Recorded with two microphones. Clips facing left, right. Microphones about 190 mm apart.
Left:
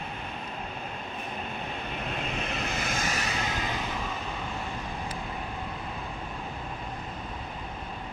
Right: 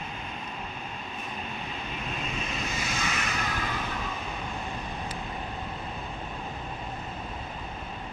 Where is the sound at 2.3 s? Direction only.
60° left (ahead or behind); by 3.2 s 45° left (ahead or behind).